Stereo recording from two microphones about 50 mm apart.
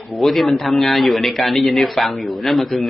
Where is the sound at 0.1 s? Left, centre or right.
Centre.